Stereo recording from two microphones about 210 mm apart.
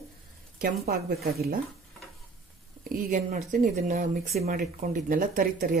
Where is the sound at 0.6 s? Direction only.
45° right (ahead or behind).